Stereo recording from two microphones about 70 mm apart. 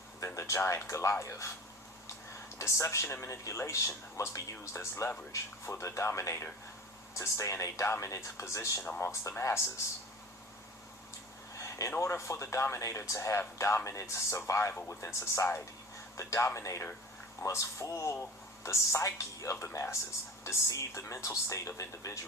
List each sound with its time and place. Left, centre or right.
0.3 s speech: left
2.6 s speech: left
11.5 s a sound: left
11.9 s speech: left